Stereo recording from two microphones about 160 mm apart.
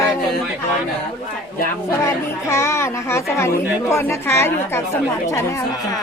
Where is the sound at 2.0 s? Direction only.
20° left (ahead or behind).